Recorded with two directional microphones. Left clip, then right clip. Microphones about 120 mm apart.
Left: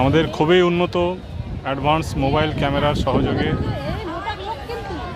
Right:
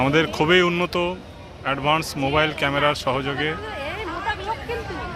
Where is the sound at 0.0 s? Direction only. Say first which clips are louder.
Left 2 dB; 30° left (ahead or behind).